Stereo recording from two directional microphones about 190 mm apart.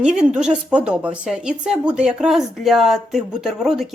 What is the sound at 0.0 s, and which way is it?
A woman's voice, 5° right (ahead or behind).